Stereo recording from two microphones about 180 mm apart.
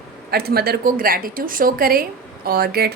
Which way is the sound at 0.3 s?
60° right (ahead or behind).